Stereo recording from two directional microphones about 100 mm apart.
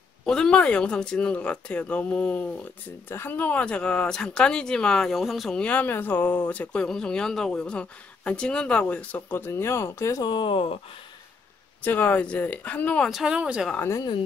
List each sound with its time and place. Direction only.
0.2 s speech: 5° left (ahead or behind)
5.6 s speech: 15° left (ahead or behind)
10.2 s speech: 50° left (ahead or behind)
11.8 s speech: 20° left (ahead or behind)
13.1 s speech: 5° right (ahead or behind)